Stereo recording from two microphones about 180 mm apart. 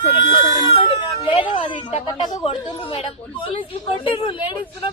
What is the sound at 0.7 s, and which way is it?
Speech, 30° left (ahead or behind).